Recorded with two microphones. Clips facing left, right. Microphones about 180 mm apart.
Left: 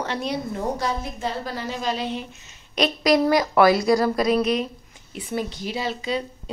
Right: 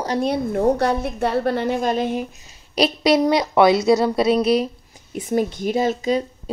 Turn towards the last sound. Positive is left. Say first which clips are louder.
# right 7 dB
turn(degrees=-45)  # may be behind; listen again after turning